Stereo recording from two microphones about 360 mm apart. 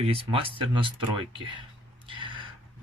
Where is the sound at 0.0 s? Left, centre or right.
Centre.